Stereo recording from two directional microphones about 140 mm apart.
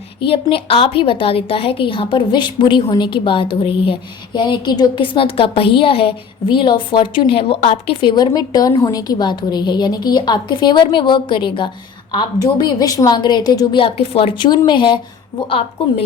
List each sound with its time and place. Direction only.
0.2 s a woman's voice: 40° left (ahead or behind)
8.1 s a woman's voice: 30° left (ahead or behind)